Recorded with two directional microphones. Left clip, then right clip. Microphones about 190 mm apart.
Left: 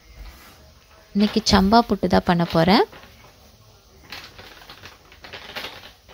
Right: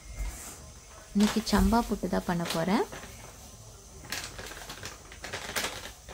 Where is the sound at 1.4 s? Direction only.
35° left (ahead or behind).